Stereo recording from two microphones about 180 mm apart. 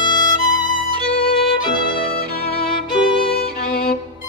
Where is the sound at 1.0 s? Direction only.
60° left (ahead or behind).